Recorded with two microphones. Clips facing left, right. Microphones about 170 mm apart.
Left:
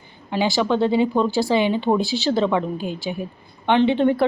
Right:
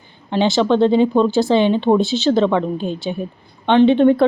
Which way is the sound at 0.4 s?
20° right (ahead or behind).